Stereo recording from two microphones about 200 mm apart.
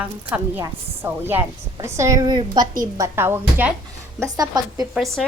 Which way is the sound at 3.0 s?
10° right (ahead or behind).